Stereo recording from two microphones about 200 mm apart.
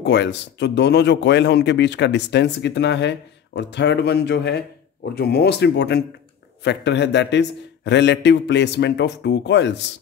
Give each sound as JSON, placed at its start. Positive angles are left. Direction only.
{"t": 0.0, "sound": "speech", "side_deg": 60}